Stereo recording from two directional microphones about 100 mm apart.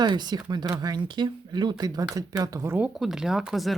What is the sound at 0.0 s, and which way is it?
Speech, 45° right (ahead or behind).